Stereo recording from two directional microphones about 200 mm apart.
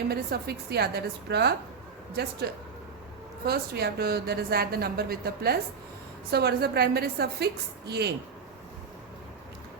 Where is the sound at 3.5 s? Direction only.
50° right (ahead or behind).